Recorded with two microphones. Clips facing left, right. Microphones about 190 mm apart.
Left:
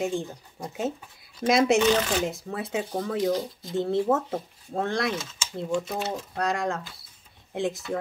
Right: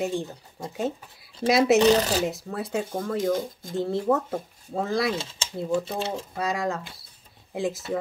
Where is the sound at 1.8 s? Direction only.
35° right (ahead or behind).